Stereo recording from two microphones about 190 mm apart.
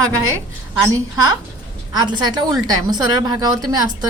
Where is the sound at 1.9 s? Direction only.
20° right (ahead or behind).